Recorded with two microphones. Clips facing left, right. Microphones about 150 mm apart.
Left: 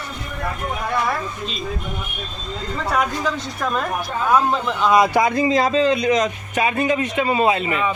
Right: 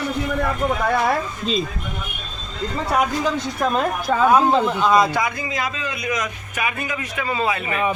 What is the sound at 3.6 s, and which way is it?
Speech, 25° right (ahead or behind).